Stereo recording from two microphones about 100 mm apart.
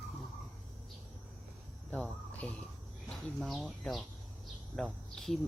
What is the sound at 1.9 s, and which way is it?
Speech, 15° left (ahead or behind).